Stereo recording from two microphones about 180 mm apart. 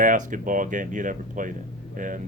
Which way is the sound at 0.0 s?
50° right (ahead or behind).